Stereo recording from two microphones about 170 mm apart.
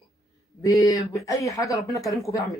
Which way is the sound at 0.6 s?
20° left (ahead or behind).